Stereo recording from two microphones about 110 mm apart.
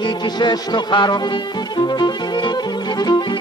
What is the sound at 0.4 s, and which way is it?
Speech, 40° left (ahead or behind).